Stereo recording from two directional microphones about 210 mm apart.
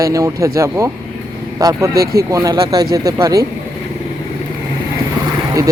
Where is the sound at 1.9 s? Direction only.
45° right (ahead or behind).